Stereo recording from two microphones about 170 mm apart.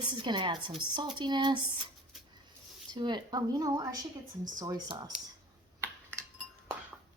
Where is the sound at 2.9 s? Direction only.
25° right (ahead or behind).